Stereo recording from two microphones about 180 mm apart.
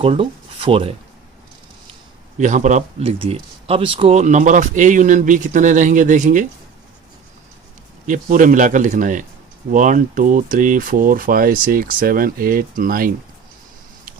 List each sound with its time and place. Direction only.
0.0 s speech: 30° right (ahead or behind)
2.4 s speech: 45° right (ahead or behind)
8.0 s speech: 45° right (ahead or behind)